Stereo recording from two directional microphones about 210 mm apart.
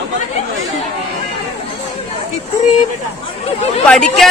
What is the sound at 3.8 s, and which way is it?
Speech, 5° left (ahead or behind).